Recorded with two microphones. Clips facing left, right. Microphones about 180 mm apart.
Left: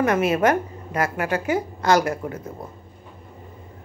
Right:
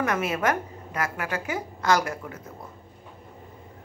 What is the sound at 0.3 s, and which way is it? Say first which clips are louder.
A woman's voice: left 6 dB; 30° left (ahead or behind).